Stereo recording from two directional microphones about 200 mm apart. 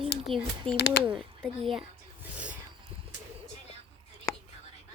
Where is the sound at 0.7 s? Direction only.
55° left (ahead or behind).